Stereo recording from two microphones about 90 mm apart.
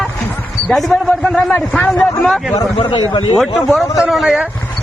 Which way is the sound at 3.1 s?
90° left.